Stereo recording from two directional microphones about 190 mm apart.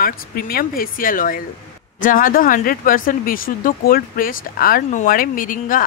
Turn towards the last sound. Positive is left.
turn(degrees=45)  # may be behind; listen again after turning